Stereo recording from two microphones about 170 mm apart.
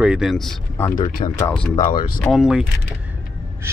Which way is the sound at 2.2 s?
Centre (ahead or behind).